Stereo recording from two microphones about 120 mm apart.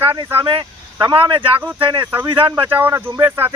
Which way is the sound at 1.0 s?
45° right (ahead or behind).